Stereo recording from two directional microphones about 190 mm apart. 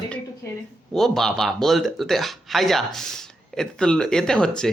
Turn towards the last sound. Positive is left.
turn(degrees=5)  # may be behind; listen again after turning